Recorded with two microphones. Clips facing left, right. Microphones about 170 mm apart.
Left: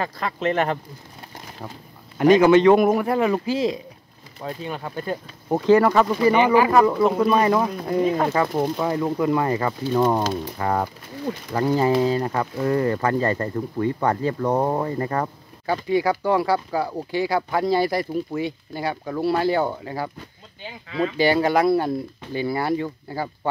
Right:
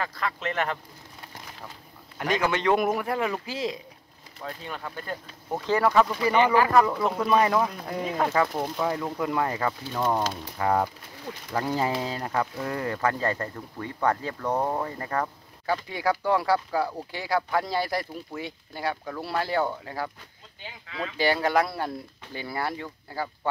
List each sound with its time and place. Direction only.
0.0 s speech: 25° left (ahead or behind)
2.1 s speech: 25° left (ahead or behind)
5.7 s speech: 10° left (ahead or behind)
8.5 s speech: 15° left (ahead or behind)
10.6 s speech: 5° right (ahead or behind); by 14.9 s 20° left (ahead or behind)
15.0 s speech: 10° left (ahead or behind)
21.2 s speech: 15° left (ahead or behind)